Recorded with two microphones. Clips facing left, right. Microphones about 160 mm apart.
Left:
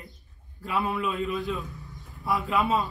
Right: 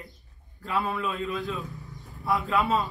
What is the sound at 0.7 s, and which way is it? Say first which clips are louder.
Speech: left 1 dB; centre (ahead or behind).